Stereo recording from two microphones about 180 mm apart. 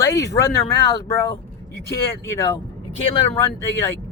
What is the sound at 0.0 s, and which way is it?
Speech, 15° left (ahead or behind).